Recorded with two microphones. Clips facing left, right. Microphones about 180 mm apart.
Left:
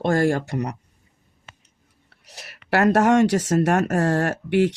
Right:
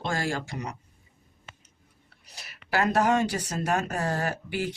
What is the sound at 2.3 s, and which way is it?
Speech, 70° left (ahead or behind).